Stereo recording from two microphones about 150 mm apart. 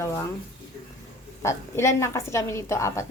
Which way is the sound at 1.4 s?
20° left (ahead or behind).